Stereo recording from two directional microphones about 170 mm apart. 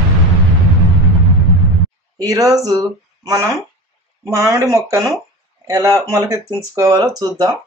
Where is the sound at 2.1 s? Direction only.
20° right (ahead or behind).